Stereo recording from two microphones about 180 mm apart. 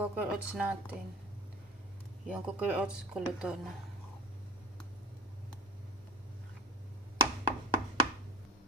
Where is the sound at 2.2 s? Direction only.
5° right (ahead or behind).